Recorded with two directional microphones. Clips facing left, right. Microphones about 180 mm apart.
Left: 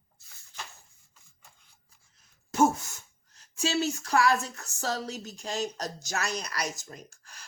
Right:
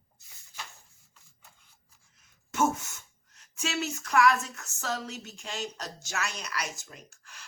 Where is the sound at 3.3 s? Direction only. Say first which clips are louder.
Left 5 dB; 30° left (ahead or behind).